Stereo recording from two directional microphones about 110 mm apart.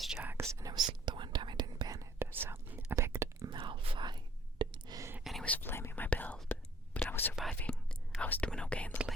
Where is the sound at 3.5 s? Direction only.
50° right (ahead or behind).